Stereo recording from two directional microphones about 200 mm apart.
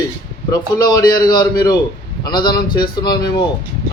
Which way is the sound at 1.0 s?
45° left (ahead or behind).